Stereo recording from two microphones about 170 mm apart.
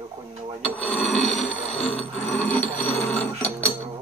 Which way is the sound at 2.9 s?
40° left (ahead or behind).